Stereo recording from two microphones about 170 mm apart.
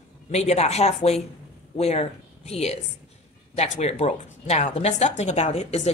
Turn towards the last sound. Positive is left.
turn(degrees=40)  # may be behind; listen again after turning